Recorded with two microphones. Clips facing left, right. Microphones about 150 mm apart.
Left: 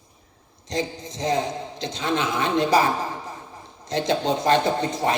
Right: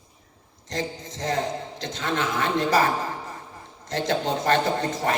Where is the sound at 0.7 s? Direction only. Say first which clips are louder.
Left 3 dB; 15° left (ahead or behind).